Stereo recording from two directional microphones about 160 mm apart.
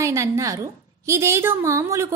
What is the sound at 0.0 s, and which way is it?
A woman's voice, 20° right (ahead or behind).